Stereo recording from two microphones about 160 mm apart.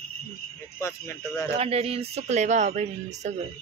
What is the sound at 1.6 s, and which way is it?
Speech, 40° right (ahead or behind).